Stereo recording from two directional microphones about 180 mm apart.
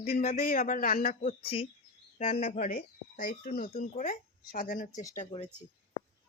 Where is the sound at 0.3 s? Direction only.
55° left (ahead or behind).